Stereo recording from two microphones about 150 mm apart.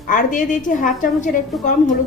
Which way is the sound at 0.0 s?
60° left (ahead or behind).